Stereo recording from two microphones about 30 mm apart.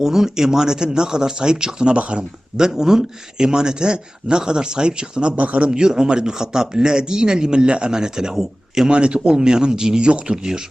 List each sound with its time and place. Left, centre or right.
0.0 s speech: centre
2.0 s speech: right
2.6 s speech: right
5.4 s speech: right
5.6 s speech: right
8.9 s speech: right